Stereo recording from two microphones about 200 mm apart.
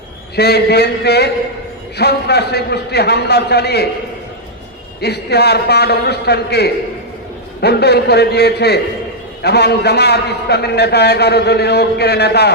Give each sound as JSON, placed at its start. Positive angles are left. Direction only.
{"t": 0.3, "sound": "a man's voice", "side_deg": 55}
{"t": 4.9, "sound": "a man's voice", "side_deg": 55}